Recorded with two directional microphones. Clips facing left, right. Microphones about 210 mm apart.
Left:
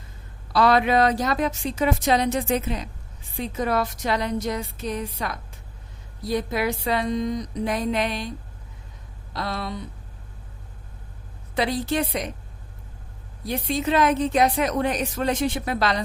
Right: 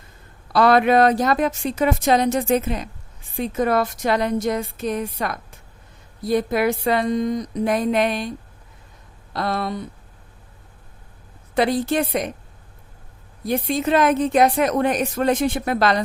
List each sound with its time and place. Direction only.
0.5 s a woman's voice: 55° right (ahead or behind)
9.3 s a woman's voice: 55° right (ahead or behind)
11.5 s a woman's voice: 50° right (ahead or behind)
13.4 s a woman's voice: 50° right (ahead or behind)